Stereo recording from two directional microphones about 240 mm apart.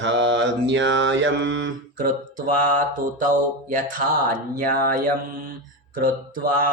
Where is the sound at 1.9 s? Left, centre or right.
Right.